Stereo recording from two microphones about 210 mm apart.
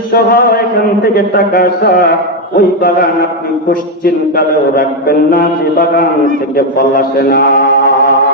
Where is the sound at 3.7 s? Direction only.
45° left (ahead or behind).